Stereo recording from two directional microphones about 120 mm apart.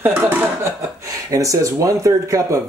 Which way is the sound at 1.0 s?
25° right (ahead or behind).